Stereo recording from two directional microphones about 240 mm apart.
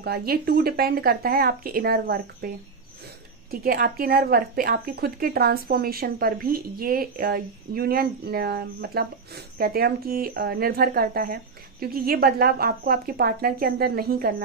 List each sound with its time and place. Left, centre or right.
0.0 s speech: right
3.6 s speech: right